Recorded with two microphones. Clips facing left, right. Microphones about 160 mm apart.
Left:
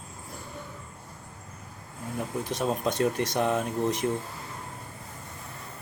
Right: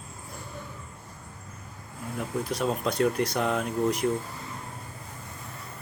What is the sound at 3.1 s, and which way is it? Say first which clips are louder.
Speech: even; 20° left (ahead or behind).